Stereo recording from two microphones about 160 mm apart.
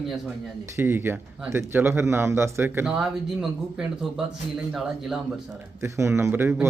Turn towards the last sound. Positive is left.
turn(degrees=-10)  # may be behind; listen again after turning